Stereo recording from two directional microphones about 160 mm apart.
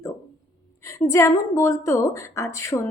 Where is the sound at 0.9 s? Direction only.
20° left (ahead or behind).